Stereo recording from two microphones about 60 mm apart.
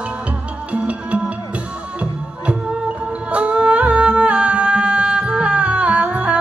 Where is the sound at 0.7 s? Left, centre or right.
Right.